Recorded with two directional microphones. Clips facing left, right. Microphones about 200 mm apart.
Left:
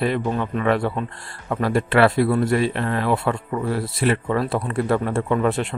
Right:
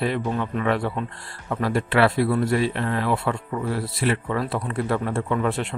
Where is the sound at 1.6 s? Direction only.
50° left (ahead or behind).